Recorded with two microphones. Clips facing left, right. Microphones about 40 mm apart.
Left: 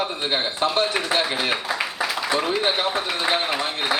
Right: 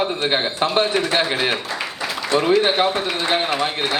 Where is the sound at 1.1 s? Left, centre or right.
Centre.